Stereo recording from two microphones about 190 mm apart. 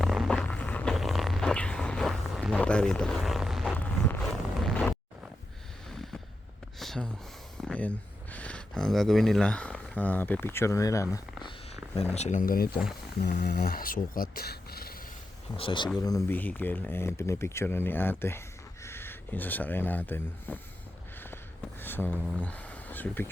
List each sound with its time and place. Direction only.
0.0 s a sound: centre (ahead or behind)
6.7 s a sound: centre (ahead or behind)
7.6 s speech: 5° left (ahead or behind)
12.1 s speech: 40° left (ahead or behind)
15.5 s speech: 25° left (ahead or behind); by 20.6 s 10° left (ahead or behind)
21.8 s speech: 10° left (ahead or behind)